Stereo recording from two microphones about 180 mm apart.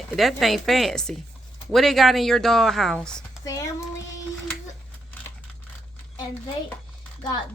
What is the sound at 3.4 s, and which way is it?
Child singing, 20° left (ahead or behind).